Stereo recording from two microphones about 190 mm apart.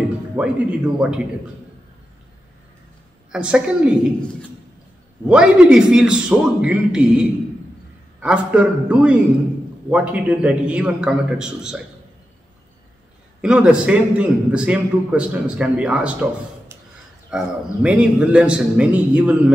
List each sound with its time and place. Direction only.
0.4 s a man's voice: 5° right (ahead or behind)
3.3 s a man's voice: 5° right (ahead or behind)
5.3 s a man's voice: 5° right (ahead or behind)
13.4 s a man's voice: 5° right (ahead or behind)